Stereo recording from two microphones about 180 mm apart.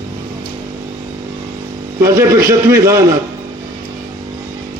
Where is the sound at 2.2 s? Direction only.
15° right (ahead or behind).